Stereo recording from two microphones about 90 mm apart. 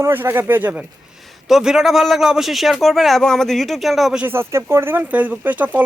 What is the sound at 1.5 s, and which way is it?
A man's voice, 5° right (ahead or behind).